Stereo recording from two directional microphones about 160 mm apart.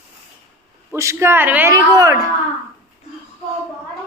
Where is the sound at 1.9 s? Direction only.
20° right (ahead or behind).